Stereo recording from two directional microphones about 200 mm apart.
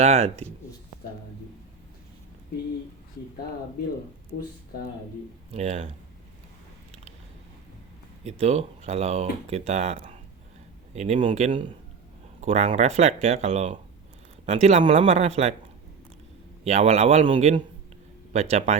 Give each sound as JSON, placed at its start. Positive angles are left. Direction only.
{"t": 0.0, "sound": "speech", "side_deg": -30}
{"t": 5.5, "sound": "speech", "side_deg": -30}
{"t": 8.2, "sound": "speech", "side_deg": -30}
{"t": 16.6, "sound": "speech", "side_deg": -35}